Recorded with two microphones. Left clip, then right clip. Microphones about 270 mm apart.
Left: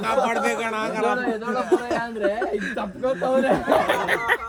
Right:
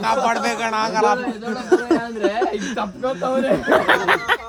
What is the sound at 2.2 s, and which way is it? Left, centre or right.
Speech, centre.